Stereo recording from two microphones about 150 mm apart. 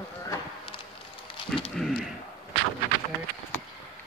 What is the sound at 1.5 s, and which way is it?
Speech, 5° right (ahead or behind).